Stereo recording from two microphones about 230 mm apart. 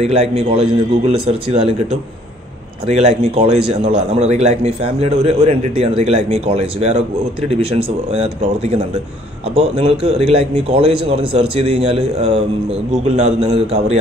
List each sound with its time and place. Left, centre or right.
0.0 s a man's voice: right
2.9 s a man's voice: right